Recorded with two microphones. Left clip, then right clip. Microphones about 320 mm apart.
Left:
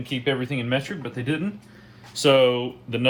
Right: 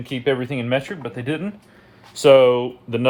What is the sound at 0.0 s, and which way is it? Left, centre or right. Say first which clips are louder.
Speech: right 4 dB; right.